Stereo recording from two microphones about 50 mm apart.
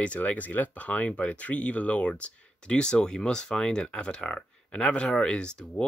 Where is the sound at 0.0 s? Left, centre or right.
Left.